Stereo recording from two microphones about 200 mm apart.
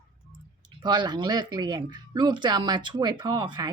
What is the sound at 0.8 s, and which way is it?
Speech, 20° right (ahead or behind).